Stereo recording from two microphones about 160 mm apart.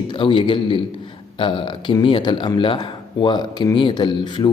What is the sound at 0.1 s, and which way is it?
Speech, 30° left (ahead or behind).